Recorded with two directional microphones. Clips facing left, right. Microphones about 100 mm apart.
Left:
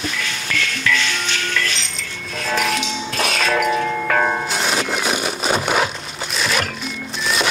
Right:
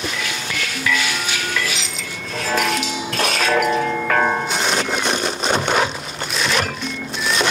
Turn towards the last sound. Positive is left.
turn(degrees=0)  # may be behind; listen again after turning